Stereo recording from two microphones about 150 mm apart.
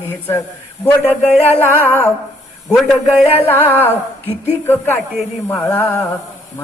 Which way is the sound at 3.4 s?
15° left (ahead or behind).